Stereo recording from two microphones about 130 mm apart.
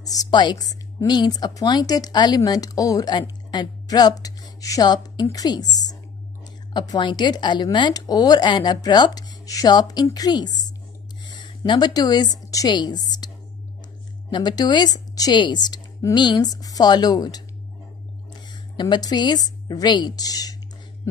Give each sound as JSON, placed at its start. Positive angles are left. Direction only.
{"t": 0.0, "sound": "a woman's voice", "side_deg": 30}
{"t": 14.3, "sound": "a woman's voice", "side_deg": 35}
{"t": 18.5, "sound": "speech", "side_deg": 35}